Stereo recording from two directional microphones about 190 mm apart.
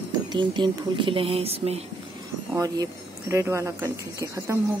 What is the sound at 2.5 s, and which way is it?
Speech, 20° right (ahead or behind).